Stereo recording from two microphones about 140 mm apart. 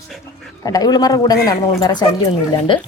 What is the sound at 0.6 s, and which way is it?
A man's voice, 25° left (ahead or behind).